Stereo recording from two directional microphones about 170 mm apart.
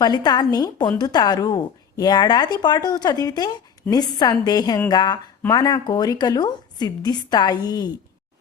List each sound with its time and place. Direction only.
0.0 s speech: 25° left (ahead or behind)